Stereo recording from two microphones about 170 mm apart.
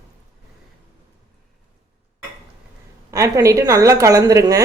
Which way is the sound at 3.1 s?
20° right (ahead or behind).